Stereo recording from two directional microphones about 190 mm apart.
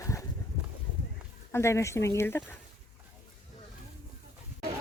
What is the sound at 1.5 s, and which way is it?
Speech, 15° left (ahead or behind).